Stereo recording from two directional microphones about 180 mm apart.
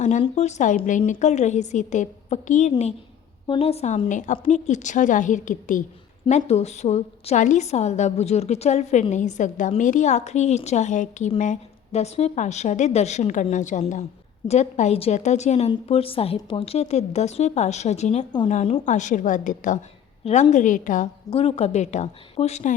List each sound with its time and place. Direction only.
0.0 s a woman's voice: 40° left (ahead or behind)
3.4 s a woman's voice: 30° left (ahead or behind); by 21.1 s 45° left (ahead or behind)
21.3 s a woman's voice: 35° left (ahead or behind)